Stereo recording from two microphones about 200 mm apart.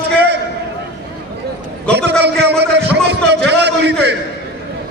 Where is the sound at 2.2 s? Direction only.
55° right (ahead or behind).